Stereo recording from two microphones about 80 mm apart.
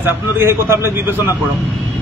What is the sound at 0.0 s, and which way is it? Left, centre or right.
A man's voice, right.